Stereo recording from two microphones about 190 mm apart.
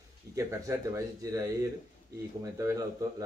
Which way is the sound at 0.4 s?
15° right (ahead or behind).